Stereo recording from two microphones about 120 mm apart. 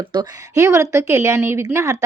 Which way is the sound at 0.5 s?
25° right (ahead or behind).